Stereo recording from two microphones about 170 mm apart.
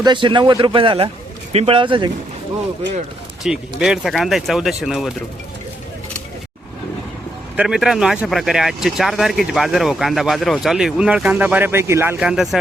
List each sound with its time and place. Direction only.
0.0 s speech: 30° right (ahead or behind)
3.4 s speech: 5° right (ahead or behind)
7.5 s speech: 5° right (ahead or behind)